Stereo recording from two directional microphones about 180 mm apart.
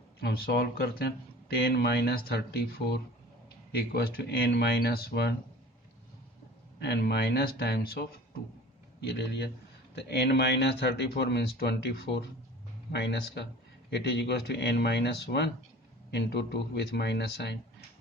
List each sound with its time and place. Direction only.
0.2 s speech: 60° left (ahead or behind)
3.9 s speech: 60° left (ahead or behind)
6.7 s speech: 65° left (ahead or behind)